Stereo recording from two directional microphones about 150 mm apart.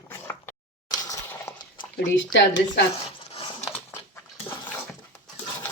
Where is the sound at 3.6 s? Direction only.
20° left (ahead or behind).